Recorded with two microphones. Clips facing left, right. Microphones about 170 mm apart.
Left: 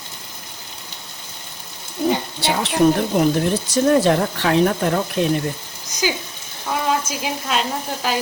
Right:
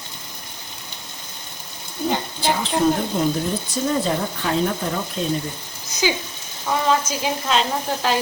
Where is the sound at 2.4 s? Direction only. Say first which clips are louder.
Left 3 dB; 70° left (ahead or behind).